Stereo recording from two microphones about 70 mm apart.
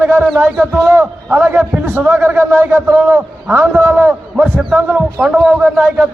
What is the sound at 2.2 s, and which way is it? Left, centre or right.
A man's voice, right.